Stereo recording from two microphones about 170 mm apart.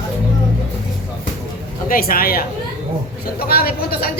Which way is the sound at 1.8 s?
55° left (ahead or behind).